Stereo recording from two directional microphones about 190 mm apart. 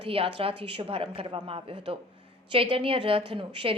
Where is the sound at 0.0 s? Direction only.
30° right (ahead or behind).